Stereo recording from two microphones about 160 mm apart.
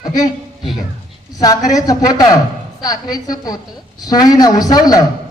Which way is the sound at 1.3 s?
25° left (ahead or behind).